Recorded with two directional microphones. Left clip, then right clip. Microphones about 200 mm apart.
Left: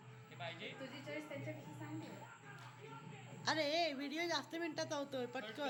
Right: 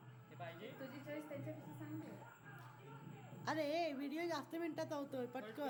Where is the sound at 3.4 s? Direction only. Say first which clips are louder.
Left 3 dB; 10° right (ahead or behind).